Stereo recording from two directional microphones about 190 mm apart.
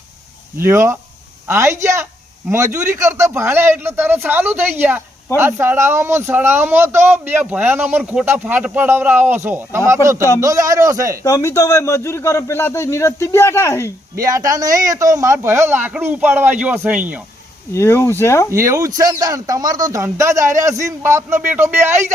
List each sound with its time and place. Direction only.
0.5 s speech: 15° right (ahead or behind)
11.2 s a man's voice: 15° left (ahead or behind)
14.2 s speech: 20° right (ahead or behind)
17.7 s a man's voice: 15° left (ahead or behind)
18.5 s speech: 15° right (ahead or behind)